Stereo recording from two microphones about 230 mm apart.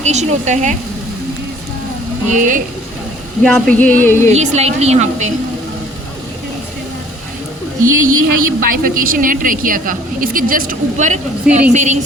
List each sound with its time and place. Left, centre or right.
0.0 s a woman's voice: right
2.3 s speech: right
3.4 s a sound: centre
4.3 s a woman's voice: right
7.9 s speech: right